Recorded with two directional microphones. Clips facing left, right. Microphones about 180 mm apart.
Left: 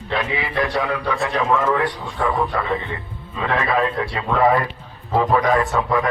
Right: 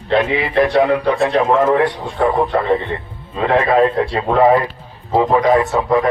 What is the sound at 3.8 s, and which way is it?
Speech, 35° right (ahead or behind).